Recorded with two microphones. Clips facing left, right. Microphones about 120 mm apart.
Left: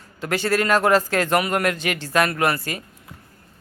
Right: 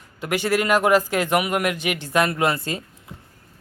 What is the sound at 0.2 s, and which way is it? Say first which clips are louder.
A man's voice: even; 15° right (ahead or behind).